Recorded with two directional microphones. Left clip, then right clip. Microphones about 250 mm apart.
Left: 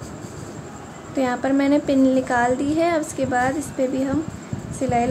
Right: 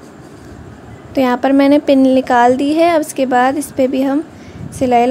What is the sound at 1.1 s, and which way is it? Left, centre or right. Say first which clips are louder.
Speech: right 9 dB; right.